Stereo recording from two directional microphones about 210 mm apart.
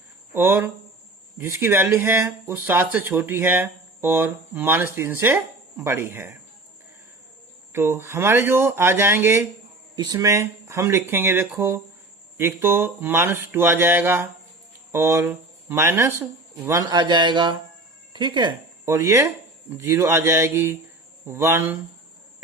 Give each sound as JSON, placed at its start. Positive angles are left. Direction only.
{"t": 0.3, "sound": "speech", "side_deg": -10}
{"t": 7.7, "sound": "speech", "side_deg": -10}